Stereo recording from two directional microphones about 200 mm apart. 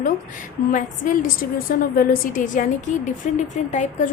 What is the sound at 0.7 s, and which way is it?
A woman's voice, 40° left (ahead or behind).